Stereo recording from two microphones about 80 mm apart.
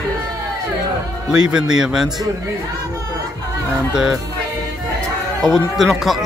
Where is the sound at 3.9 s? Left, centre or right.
Centre.